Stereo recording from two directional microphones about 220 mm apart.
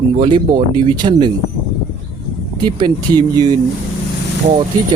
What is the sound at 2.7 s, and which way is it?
Speech, 20° right (ahead or behind).